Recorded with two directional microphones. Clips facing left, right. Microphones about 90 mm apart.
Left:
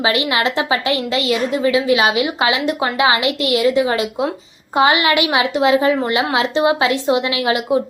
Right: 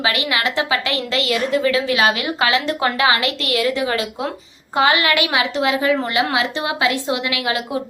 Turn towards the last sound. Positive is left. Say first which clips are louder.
# left 5 dB
turn(degrees=25)  # may be behind; listen again after turning